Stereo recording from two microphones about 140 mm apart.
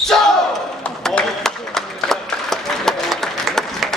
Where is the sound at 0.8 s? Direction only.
5° left (ahead or behind).